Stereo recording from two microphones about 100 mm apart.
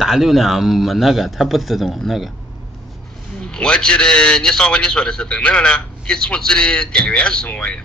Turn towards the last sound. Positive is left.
turn(degrees=10)  # may be behind; listen again after turning